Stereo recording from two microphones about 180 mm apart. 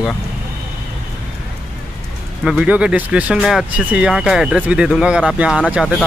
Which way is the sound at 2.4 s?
5° right (ahead or behind).